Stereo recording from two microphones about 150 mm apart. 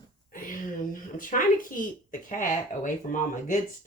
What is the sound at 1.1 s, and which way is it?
Speech, 65° left (ahead or behind).